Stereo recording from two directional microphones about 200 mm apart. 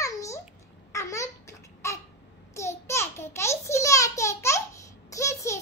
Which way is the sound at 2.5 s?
15° left (ahead or behind).